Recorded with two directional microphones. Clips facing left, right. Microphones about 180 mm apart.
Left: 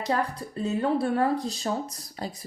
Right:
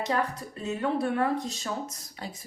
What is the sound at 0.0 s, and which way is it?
Speech, 35° left (ahead or behind).